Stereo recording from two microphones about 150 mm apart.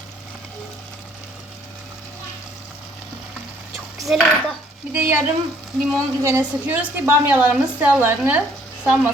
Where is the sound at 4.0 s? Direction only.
Centre (ahead or behind).